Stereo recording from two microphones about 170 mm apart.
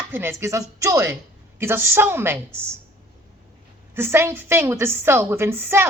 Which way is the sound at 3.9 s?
15° right (ahead or behind).